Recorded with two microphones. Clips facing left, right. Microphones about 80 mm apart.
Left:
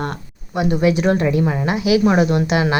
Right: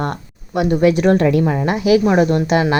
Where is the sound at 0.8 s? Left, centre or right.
Right.